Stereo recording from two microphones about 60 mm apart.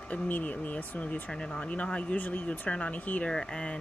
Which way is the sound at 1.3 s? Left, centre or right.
Centre.